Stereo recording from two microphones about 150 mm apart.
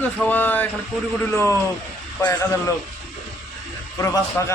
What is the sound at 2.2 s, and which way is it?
Speech, 20° left (ahead or behind).